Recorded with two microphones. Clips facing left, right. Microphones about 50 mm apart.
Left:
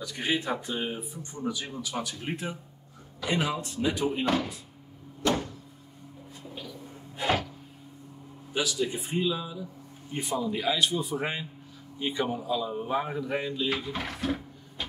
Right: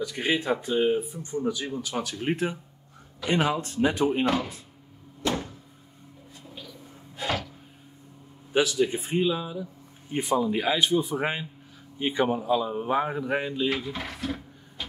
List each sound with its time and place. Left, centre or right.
0.0 s speech: right
6.4 s a sound: centre
6.7 s gasp: centre
8.5 s speech: right
13.7 s drawer open or close: centre